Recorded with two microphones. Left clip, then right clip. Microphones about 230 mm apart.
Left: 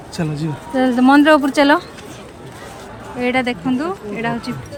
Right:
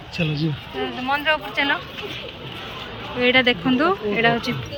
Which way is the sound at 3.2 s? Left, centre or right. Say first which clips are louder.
Right 2 dB; centre.